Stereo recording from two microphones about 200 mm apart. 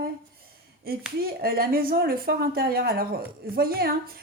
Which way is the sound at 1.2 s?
50° right (ahead or behind).